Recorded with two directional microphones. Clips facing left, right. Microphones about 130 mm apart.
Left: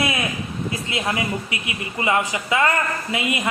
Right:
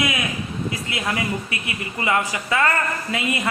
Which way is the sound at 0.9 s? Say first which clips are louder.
Left 2 dB; 25° left (ahead or behind).